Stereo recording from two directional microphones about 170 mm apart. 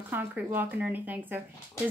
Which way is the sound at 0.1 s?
10° right (ahead or behind).